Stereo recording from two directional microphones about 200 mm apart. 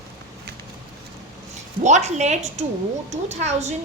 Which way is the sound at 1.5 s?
35° right (ahead or behind).